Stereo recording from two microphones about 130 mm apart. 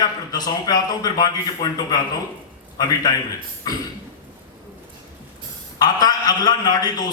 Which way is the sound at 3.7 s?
30° left (ahead or behind).